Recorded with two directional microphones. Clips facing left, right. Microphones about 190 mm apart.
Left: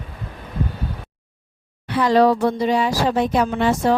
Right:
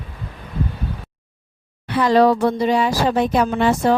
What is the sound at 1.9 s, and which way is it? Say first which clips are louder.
A woman's voice: right 1 dB; 60° right (ahead or behind).